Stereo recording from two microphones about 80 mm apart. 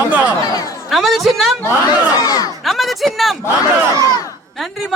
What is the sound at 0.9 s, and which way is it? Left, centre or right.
Speech, centre.